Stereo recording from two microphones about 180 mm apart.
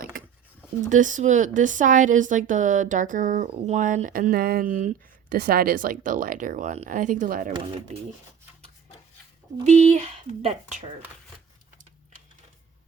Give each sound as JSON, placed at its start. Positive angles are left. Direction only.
{"t": 0.9, "sound": "speech", "side_deg": -45}
{"t": 9.6, "sound": "speech", "side_deg": -40}